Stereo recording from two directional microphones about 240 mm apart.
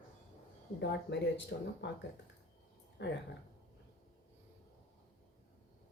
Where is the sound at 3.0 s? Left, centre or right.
Left.